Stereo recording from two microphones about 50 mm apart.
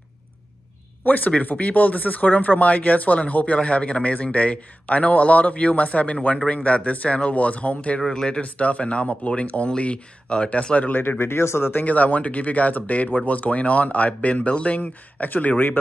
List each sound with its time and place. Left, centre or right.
1.0 s speech: left
8.0 s speech: centre
8.4 s speech: left
10.9 s speech: left
11.7 s speech: left
14.8 s speech: left